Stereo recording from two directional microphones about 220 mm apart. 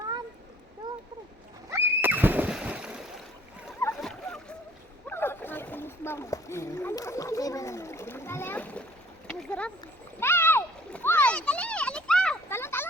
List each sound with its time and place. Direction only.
1.7 s neigh: 10° right (ahead or behind)
3.8 s splash: 5° left (ahead or behind)
5.0 s rowboat: 10° left (ahead or behind)
9.2 s a sound: 5° left (ahead or behind)